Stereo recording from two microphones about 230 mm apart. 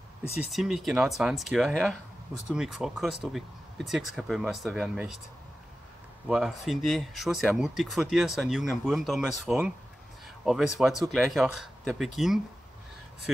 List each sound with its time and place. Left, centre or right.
0.4 s speech: centre
6.2 s speech: centre